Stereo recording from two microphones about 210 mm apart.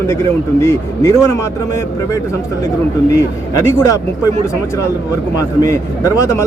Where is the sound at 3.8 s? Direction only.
15° left (ahead or behind).